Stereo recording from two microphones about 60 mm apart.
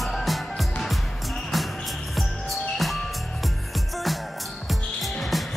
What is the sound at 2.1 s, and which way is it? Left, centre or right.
Music, centre.